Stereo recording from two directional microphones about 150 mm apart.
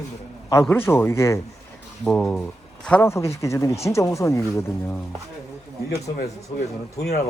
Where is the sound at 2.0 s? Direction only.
5° left (ahead or behind); by 4.9 s 20° left (ahead or behind).